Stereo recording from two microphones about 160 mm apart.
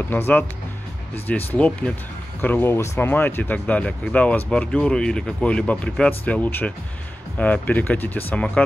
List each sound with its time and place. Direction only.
0.1 s speech: 10° left (ahead or behind)